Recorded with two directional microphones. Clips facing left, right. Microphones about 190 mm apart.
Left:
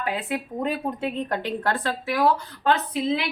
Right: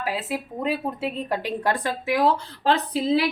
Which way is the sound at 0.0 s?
5° right (ahead or behind).